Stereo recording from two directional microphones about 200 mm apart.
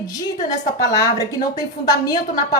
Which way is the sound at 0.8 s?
15° left (ahead or behind).